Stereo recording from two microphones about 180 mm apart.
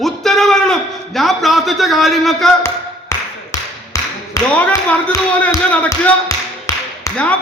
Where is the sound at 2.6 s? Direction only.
15° left (ahead or behind).